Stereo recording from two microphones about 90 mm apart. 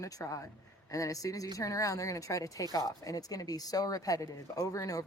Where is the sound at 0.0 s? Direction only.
40° left (ahead or behind).